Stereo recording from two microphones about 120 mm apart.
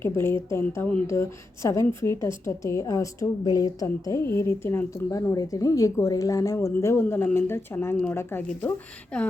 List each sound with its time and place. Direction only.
0.0 s a woman's voice: 20° left (ahead or behind)
9.1 s speech: 5° left (ahead or behind)